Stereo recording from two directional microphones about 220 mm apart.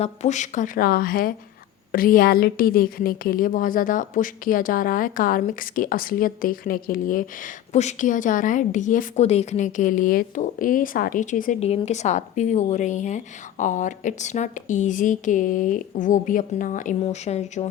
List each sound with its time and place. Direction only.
0.0 s a woman's voice: 30° left (ahead or behind)